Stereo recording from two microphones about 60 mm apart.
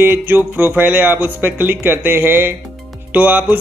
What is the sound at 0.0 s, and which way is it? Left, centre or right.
Speech, right.